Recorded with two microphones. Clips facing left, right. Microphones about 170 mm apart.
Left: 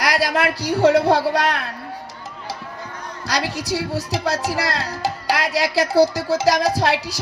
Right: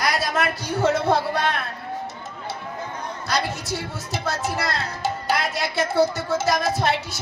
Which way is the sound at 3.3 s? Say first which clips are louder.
Left 3 dB; 80° left.